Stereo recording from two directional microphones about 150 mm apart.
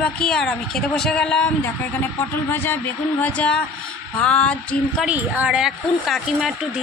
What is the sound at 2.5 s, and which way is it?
Speech, 15° left (ahead or behind).